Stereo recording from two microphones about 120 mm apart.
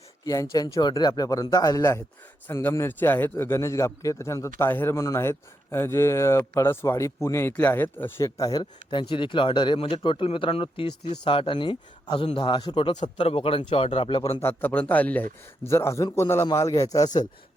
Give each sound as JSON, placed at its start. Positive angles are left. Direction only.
{"t": 0.5, "sound": "a man's voice", "side_deg": 30}
{"t": 8.4, "sound": "speech", "side_deg": 30}
{"t": 13.1, "sound": "speech", "side_deg": 55}
{"t": 14.4, "sound": "a man's voice", "side_deg": 15}